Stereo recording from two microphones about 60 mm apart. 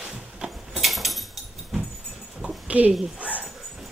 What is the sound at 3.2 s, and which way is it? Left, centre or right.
Dog, right.